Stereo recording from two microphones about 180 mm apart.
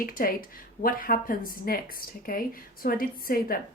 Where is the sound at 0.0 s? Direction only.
50° left (ahead or behind).